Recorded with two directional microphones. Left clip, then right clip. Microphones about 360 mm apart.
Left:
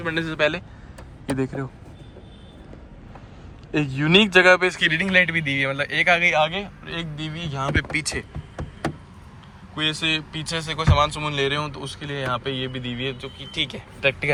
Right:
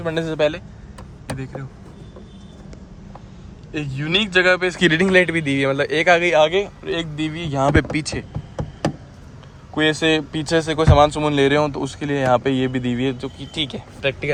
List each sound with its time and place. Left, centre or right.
0.0 s speech: centre
1.3 s speech: centre
3.7 s speech: centre
9.7 s speech: right; by 14.3 s centre